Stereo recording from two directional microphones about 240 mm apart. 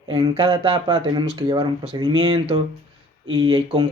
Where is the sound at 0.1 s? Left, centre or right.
Centre.